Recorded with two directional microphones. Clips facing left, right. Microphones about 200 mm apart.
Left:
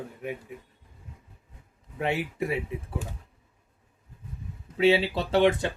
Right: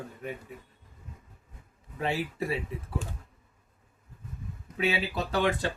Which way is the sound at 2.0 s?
20° left (ahead or behind).